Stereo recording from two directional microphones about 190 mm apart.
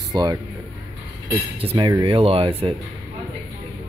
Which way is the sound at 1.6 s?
25° right (ahead or behind).